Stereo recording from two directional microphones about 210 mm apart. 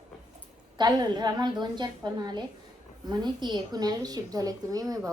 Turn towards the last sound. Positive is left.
turn(degrees=-15)  # may be behind; listen again after turning